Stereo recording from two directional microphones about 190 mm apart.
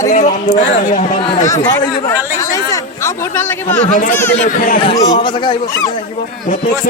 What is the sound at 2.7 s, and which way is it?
Chatter, 15° left (ahead or behind).